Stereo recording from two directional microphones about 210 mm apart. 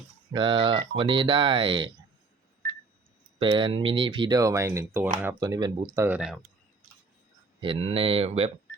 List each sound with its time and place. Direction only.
0.3 s speech: 20° right (ahead or behind)
3.3 s speech: 25° right (ahead or behind)
6.1 s speech: centre (ahead or behind)
7.6 s speech: 25° right (ahead or behind)